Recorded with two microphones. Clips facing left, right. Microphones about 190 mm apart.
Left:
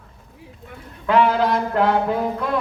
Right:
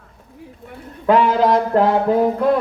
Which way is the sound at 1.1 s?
40° right (ahead or behind).